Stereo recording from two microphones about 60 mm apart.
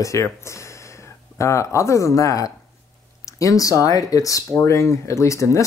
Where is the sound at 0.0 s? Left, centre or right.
Left.